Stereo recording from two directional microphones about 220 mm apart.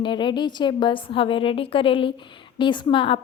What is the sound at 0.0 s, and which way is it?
A woman's voice, 20° left (ahead or behind).